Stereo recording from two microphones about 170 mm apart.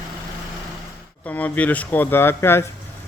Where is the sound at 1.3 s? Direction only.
10° left (ahead or behind).